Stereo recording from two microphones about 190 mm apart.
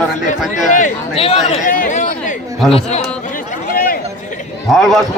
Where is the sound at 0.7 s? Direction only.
35° left (ahead or behind).